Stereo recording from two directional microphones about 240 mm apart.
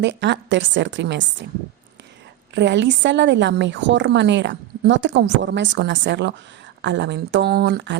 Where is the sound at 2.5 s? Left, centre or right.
Right.